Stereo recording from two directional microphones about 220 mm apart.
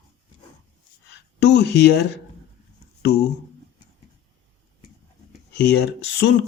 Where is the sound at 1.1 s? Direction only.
55° left (ahead or behind).